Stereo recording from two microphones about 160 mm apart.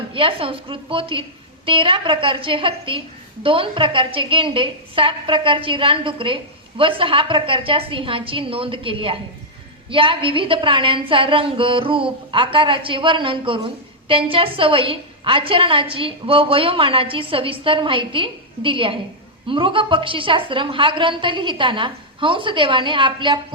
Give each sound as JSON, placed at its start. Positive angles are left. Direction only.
{"t": 0.1, "sound": "a woman's voice", "side_deg": -35}